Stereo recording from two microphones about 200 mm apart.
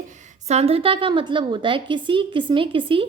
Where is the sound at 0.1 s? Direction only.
35° right (ahead or behind).